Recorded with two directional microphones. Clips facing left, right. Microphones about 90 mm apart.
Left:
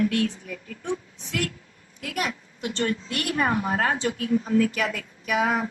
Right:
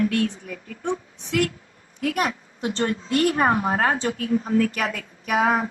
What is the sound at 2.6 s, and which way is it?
A woman's voice, 30° right (ahead or behind).